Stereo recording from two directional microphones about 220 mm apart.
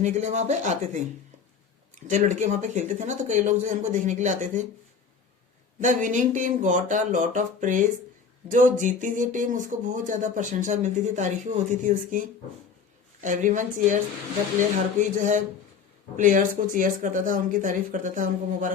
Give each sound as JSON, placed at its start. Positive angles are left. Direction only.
{"t": 0.0, "sound": "speech", "side_deg": -30}
{"t": 5.8, "sound": "speech", "side_deg": -35}
{"t": 13.2, "sound": "speech", "side_deg": -35}